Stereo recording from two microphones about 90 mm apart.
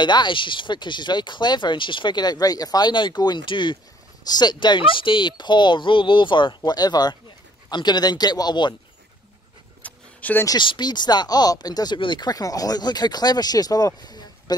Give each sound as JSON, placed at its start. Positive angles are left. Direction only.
{"t": 0.0, "sound": "speech", "side_deg": 60}
{"t": 9.8, "sound": "a sound", "side_deg": 15}
{"t": 10.6, "sound": "speech", "side_deg": 55}